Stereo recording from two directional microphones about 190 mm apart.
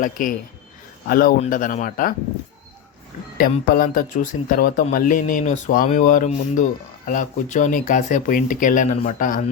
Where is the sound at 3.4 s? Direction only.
50° left (ahead or behind).